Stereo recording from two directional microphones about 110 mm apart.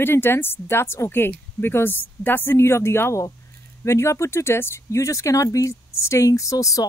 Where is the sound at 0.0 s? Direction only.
20° left (ahead or behind).